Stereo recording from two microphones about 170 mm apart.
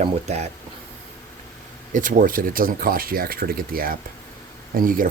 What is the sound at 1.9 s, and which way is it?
Speech, 50° right (ahead or behind).